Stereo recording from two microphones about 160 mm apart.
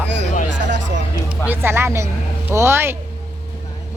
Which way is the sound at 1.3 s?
10° right (ahead or behind).